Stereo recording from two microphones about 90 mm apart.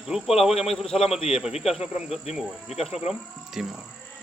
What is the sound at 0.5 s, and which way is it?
Speech, 90° left.